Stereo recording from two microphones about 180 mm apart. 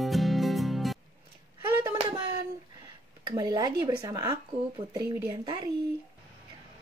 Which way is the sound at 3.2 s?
25° right (ahead or behind).